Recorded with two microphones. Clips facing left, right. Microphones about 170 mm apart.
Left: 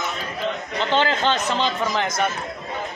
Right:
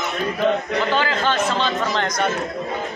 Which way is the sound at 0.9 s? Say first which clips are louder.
Left 3 dB; 25° left (ahead or behind).